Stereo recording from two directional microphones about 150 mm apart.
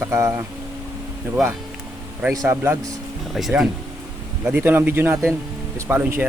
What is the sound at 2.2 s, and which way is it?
Speech, 20° right (ahead or behind).